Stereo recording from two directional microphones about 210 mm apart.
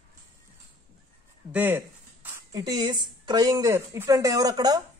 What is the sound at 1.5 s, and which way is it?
A man's voice, 10° right (ahead or behind).